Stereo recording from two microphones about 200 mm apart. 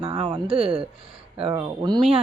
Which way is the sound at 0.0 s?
25° right (ahead or behind).